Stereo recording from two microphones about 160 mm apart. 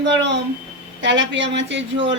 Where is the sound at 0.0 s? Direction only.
90° right.